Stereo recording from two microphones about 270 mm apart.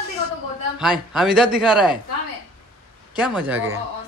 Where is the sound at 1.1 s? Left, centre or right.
Centre.